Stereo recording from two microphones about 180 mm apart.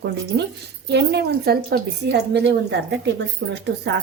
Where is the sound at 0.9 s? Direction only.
70° right (ahead or behind).